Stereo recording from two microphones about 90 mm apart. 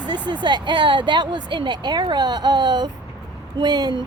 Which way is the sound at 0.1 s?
55° right (ahead or behind).